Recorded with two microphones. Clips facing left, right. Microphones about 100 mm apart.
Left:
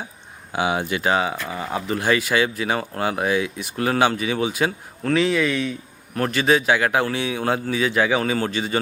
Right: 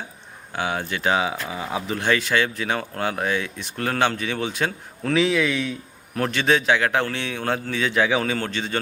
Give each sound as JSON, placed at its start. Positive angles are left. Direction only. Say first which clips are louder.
{"t": 0.5, "sound": "speech", "louder": "left 4 dB", "side_deg": 10}